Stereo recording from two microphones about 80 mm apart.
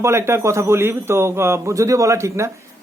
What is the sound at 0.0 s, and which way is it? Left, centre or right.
A man's voice, right.